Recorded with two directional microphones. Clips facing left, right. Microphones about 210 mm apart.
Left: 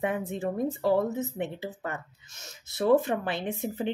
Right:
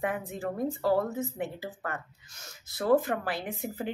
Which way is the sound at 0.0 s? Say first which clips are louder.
Left 3 dB; 25° left (ahead or behind).